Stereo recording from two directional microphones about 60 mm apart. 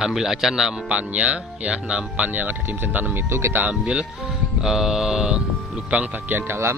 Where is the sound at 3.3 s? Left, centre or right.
Right.